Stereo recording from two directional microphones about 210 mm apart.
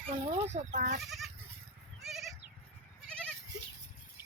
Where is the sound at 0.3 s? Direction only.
30° right (ahead or behind).